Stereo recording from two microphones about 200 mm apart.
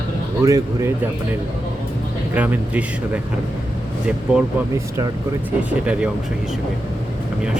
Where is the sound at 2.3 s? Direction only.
5° right (ahead or behind).